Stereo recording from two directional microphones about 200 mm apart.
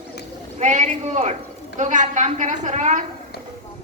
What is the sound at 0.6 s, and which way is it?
A woman's voice, 35° right (ahead or behind).